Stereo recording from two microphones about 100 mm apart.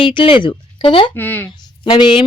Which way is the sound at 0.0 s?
60° left (ahead or behind).